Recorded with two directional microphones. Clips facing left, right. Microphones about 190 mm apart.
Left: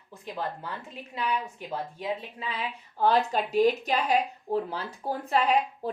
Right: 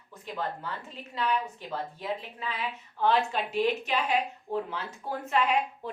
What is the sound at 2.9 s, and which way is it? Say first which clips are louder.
A child's voice: left 2 dB; 40° left (ahead or behind).